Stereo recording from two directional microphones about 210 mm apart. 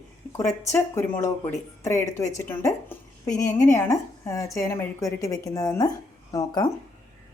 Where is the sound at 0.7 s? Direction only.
10° left (ahead or behind).